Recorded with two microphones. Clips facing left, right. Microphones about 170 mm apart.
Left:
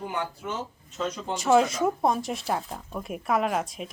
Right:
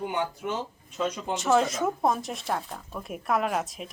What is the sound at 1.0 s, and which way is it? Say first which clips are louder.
Speech: right 1 dB; 10° right (ahead or behind).